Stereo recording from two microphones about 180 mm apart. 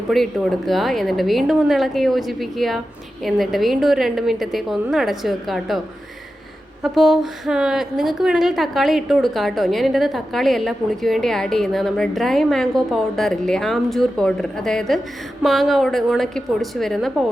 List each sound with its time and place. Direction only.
0.1 s a woman's voice: centre (ahead or behind)
6.8 s a woman's voice: centre (ahead or behind)